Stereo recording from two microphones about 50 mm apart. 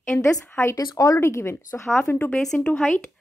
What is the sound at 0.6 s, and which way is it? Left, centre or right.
Speech, left.